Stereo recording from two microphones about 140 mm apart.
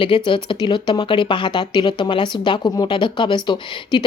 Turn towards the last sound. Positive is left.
turn(degrees=35)  # may be behind; listen again after turning